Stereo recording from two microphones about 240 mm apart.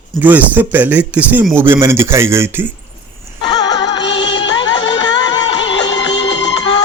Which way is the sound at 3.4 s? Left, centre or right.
Centre.